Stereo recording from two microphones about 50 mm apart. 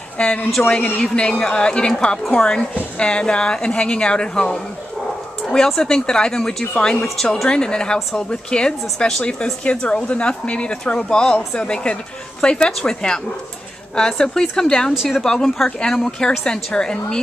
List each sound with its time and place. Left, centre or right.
0.2 s a woman's voice: left
0.6 s speech: left
1.1 s a woman's voice: centre
5.8 s a woman's voice: centre